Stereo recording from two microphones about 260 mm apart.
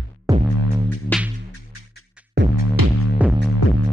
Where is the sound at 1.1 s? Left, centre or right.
Centre.